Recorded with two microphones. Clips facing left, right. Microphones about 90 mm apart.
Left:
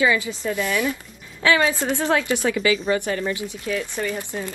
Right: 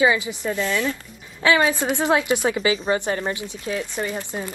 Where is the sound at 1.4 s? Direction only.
15° right (ahead or behind).